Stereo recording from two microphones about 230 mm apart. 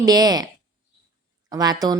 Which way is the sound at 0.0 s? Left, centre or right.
Centre.